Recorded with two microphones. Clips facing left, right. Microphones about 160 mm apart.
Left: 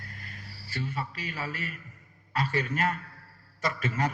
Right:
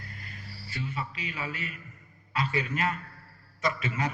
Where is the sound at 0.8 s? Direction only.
45° left (ahead or behind).